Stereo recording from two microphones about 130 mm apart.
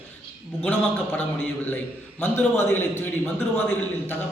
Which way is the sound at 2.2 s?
15° left (ahead or behind).